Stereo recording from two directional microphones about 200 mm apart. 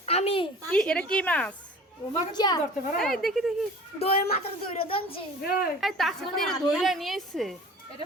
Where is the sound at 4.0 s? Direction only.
30° left (ahead or behind).